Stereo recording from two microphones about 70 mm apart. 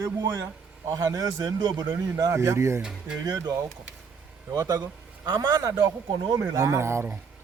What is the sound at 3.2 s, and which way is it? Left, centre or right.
A man's voice, right.